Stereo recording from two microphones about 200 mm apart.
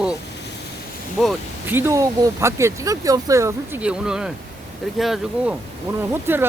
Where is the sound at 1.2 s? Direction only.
5° right (ahead or behind).